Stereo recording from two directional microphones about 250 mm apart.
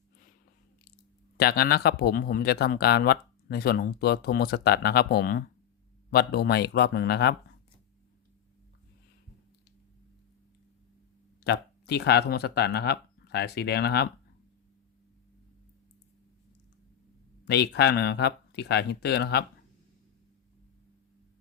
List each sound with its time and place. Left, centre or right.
1.4 s a man's voice: left
11.4 s speech: left
17.4 s a man's voice: left